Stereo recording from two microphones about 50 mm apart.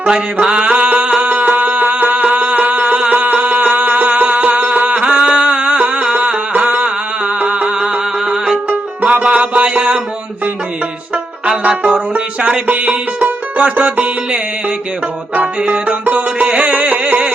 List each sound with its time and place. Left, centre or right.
0.0 s music: right
9.1 s a sound: right
11.1 s music: right